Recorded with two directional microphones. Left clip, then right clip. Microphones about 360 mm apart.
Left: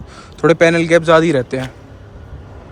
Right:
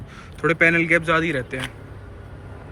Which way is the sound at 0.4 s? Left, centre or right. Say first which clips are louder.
Left 6 dB; centre.